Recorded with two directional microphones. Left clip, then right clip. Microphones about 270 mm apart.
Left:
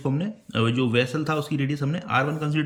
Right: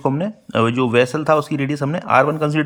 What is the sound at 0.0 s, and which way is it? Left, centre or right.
Speech, centre.